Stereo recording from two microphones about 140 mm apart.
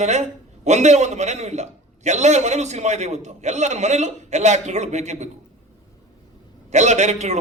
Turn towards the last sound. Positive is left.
turn(degrees=-55)  # may be behind; listen again after turning